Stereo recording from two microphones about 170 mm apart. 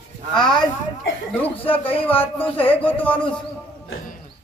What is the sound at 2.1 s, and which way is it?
Speech, 10° left (ahead or behind).